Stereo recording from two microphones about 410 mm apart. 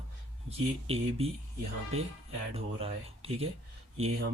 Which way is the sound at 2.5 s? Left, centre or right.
Centre.